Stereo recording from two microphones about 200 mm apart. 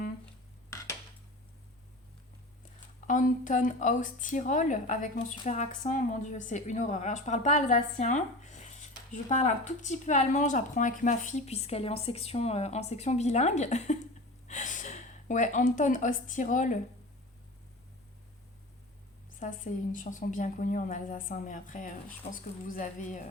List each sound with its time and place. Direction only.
0.7 s dishes: 15° left (ahead or behind)
3.1 s a woman's voice: 40° left (ahead or behind)
19.4 s speech: 40° left (ahead or behind)